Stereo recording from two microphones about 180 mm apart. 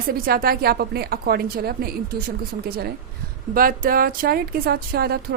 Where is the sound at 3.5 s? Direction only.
50° right (ahead or behind).